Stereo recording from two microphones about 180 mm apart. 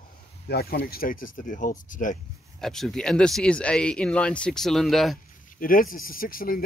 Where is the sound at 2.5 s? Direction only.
Centre (ahead or behind).